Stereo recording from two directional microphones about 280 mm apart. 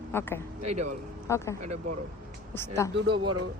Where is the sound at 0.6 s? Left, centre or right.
Right.